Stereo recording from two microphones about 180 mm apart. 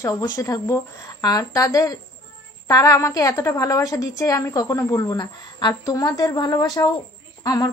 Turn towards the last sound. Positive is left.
turn(degrees=20)  # may be behind; listen again after turning